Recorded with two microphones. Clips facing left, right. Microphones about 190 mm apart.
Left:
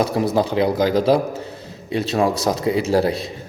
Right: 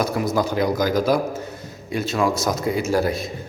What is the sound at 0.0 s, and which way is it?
A man's voice, 30° left (ahead or behind).